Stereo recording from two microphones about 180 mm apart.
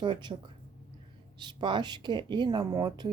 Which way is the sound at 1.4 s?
25° right (ahead or behind).